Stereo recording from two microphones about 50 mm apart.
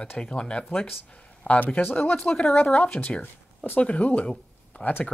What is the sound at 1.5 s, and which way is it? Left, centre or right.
Speech, left.